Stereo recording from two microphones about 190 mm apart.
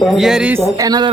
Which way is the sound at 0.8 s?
20° right (ahead or behind).